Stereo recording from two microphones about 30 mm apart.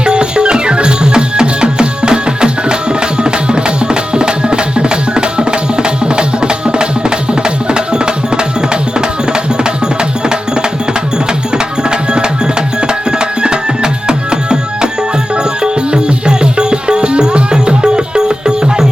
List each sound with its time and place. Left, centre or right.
0.0 s music: right